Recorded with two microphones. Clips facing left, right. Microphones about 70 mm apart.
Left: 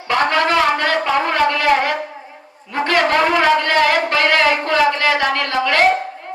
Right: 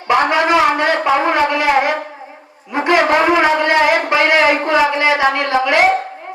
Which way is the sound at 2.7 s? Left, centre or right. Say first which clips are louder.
Right 3 dB; centre.